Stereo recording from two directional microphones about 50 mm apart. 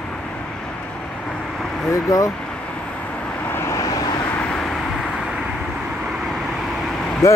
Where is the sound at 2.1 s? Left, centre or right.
Left.